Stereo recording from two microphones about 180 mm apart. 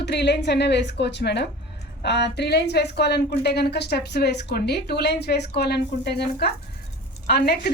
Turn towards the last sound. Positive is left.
turn(degrees=60)  # may be behind; listen again after turning